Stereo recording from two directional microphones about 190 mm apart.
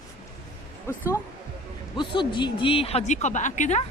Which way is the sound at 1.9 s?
25° left (ahead or behind).